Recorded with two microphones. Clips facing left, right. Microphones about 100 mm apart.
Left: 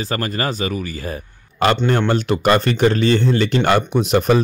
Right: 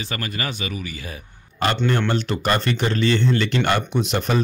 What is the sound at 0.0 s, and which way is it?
Speech, 40° left (ahead or behind).